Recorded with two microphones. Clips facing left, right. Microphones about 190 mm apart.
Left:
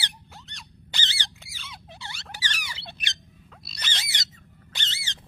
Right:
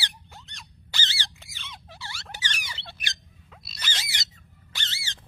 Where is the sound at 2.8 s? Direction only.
20° left (ahead or behind).